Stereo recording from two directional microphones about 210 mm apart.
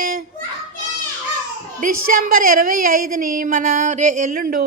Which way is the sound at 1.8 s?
40° right (ahead or behind).